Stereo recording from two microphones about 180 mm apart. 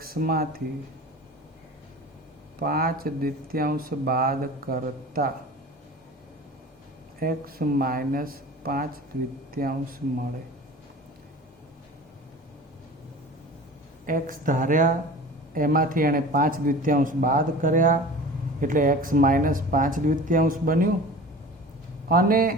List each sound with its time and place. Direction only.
0.0 s speech: 55° right (ahead or behind)
2.6 s speech: 55° right (ahead or behind)
7.2 s speech: 55° right (ahead or behind)
14.1 s speech: 50° right (ahead or behind)
22.1 s speech: 55° right (ahead or behind)